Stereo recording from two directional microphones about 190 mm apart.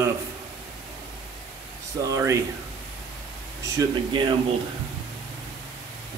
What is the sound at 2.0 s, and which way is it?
Speech, 15° right (ahead or behind).